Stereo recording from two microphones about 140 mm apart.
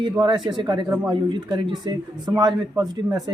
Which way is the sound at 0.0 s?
35° right (ahead or behind).